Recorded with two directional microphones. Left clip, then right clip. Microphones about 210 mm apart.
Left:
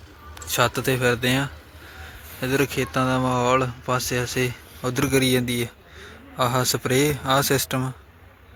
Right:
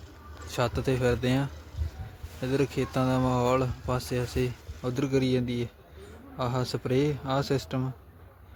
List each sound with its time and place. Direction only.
0.4 s speech: centre (ahead or behind)